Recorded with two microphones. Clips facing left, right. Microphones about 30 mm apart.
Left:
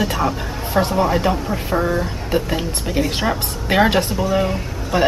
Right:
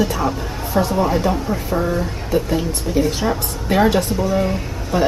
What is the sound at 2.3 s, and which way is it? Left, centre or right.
Speech, left.